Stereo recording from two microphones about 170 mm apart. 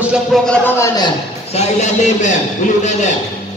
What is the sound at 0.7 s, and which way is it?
Speech, 20° left (ahead or behind).